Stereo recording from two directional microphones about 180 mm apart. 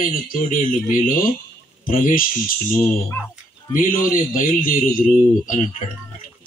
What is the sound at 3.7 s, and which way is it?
Speech, 50° left (ahead or behind).